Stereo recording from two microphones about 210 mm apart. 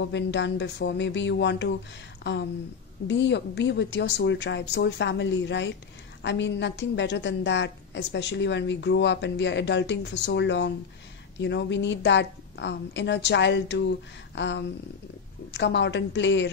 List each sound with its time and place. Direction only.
0.0 s a woman's voice: 60° left (ahead or behind)
3.1 s a woman's voice: 60° left (ahead or behind)